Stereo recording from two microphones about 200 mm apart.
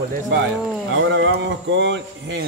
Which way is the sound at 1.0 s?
65° right (ahead or behind).